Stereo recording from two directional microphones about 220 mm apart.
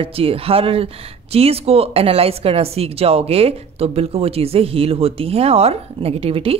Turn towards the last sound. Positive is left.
turn(degrees=-25)  # may be behind; listen again after turning